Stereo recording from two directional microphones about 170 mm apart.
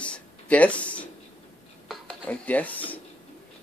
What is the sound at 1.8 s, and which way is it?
Dishes, 5° left (ahead or behind).